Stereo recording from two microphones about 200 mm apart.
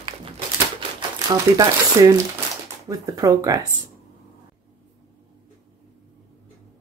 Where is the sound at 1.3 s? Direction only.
15° right (ahead or behind).